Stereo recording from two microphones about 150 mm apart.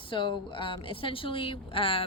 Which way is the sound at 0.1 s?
35° left (ahead or behind).